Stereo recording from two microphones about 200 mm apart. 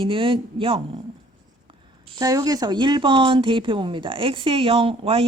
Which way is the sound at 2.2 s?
20° right (ahead or behind).